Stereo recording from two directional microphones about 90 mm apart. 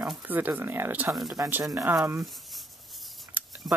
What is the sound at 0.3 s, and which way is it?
Speech, 20° right (ahead or behind).